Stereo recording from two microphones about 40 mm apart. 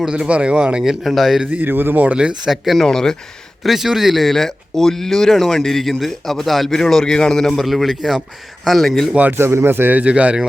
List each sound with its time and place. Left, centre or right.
0.1 s speech: right
0.8 s speech: centre
1.5 s speech: right
2.7 s speech: centre
3.6 s speech: centre
6.7 s speech: centre
7.6 s speech: centre
9.4 s speech: right
9.9 s speech: right